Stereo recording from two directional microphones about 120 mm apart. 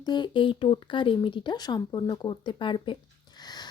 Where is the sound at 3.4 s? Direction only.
35° left (ahead or behind).